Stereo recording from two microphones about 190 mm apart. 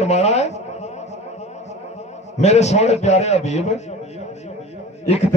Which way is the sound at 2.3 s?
35° left (ahead or behind).